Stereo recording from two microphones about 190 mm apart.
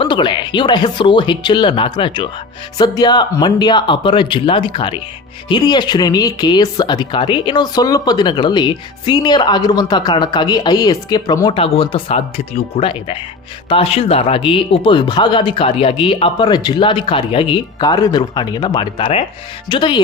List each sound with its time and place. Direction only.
0.0 s speech: 25° left (ahead or behind)